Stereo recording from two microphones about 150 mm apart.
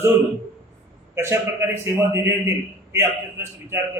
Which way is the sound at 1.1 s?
15° right (ahead or behind).